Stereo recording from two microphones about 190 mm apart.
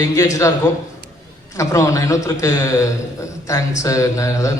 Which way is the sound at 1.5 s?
15° left (ahead or behind).